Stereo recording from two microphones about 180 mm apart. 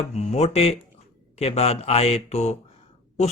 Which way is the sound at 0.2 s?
40° left (ahead or behind).